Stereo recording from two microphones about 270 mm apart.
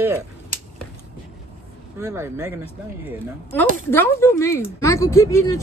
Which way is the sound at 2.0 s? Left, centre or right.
Centre.